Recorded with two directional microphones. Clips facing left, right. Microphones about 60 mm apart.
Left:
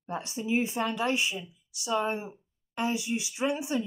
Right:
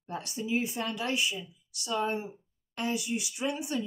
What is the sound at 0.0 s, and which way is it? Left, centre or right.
Speech, left.